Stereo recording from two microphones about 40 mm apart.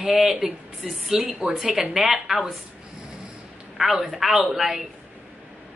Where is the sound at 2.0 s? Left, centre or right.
Centre.